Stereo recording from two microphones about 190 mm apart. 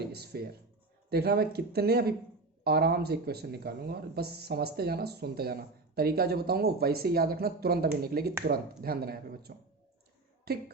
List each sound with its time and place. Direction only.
0.0 s speech: 55° right (ahead or behind)